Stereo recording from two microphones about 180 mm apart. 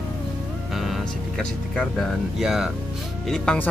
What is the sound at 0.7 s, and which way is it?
Speech, centre (ahead or behind).